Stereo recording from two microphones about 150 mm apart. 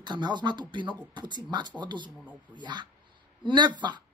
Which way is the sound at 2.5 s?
30° right (ahead or behind).